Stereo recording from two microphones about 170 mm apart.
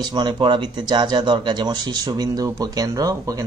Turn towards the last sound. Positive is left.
turn(degrees=-20)  # may be behind; listen again after turning